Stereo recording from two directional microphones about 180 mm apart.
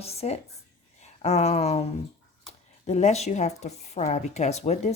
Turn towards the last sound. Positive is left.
turn(degrees=35)  # may be behind; listen again after turning